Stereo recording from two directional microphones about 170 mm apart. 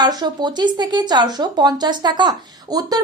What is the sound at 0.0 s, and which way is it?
A woman's voice, 25° right (ahead or behind).